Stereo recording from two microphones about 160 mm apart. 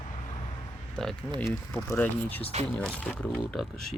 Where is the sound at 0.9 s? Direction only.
5° left (ahead or behind).